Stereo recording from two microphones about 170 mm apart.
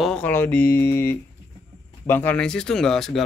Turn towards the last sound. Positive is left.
turn(degrees=0)  # may be behind; listen again after turning